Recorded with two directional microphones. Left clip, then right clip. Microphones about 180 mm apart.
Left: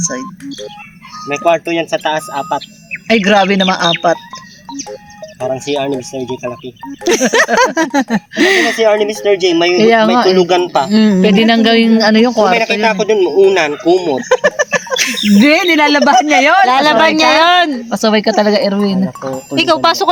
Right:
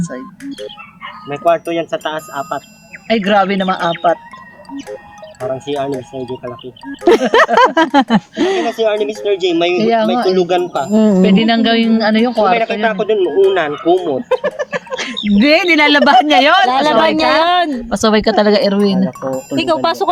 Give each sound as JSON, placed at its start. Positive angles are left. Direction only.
{"t": 1.3, "sound": "speech", "side_deg": 35}
{"t": 5.4, "sound": "speech", "side_deg": 30}
{"t": 6.1, "sound": "a woman's voice", "side_deg": 15}
{"t": 7.0, "sound": "speech", "side_deg": -20}
{"t": 8.4, "sound": "a woman's voice", "side_deg": 10}
{"t": 9.2, "sound": "speech", "side_deg": 25}
{"t": 10.9, "sound": "a woman's voice", "side_deg": 15}
{"t": 11.3, "sound": "a woman's voice", "side_deg": 25}
{"t": 15.3, "sound": "speech", "side_deg": 50}
{"t": 15.6, "sound": "speech", "side_deg": 35}
{"t": 15.9, "sound": "a woman's voice", "side_deg": 20}